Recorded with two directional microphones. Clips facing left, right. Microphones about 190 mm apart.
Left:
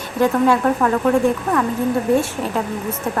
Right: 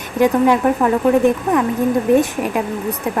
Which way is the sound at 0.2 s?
15° right (ahead or behind).